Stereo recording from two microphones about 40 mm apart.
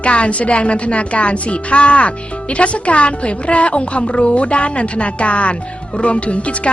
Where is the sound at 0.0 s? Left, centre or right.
Left.